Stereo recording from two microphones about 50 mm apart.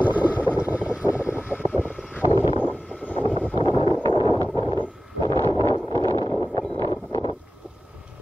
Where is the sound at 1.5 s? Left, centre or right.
Left.